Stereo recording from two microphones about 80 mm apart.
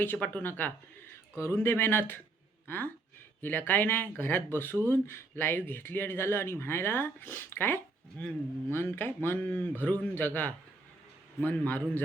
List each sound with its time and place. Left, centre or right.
0.0 s speech: left
1.4 s speech: left